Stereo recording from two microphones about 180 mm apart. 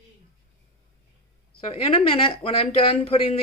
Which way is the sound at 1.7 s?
35° left (ahead or behind).